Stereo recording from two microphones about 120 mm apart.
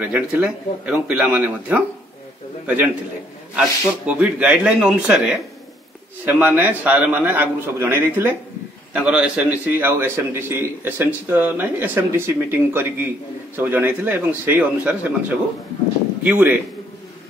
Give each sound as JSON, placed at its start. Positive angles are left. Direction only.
{"t": 0.0, "sound": "a man's voice", "side_deg": -10}